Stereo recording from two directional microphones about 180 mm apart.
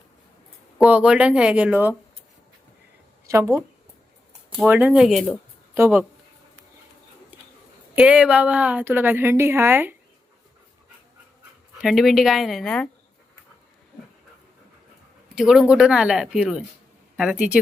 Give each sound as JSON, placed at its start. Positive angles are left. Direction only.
{"t": 0.8, "sound": "a woman's voice", "side_deg": -5}
{"t": 3.2, "sound": "speech", "side_deg": -15}
{"t": 4.5, "sound": "a woman's voice", "side_deg": -10}
{"t": 7.9, "sound": "a woman's voice", "side_deg": -10}
{"t": 11.8, "sound": "a woman's voice", "side_deg": 0}
{"t": 15.4, "sound": "a woman's voice", "side_deg": -5}